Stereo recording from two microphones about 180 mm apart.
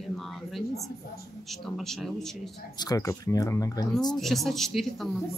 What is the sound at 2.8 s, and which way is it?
Speech, 20° left (ahead or behind).